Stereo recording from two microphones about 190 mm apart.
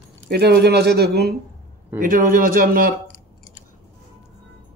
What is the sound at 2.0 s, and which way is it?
Speech, 45° right (ahead or behind).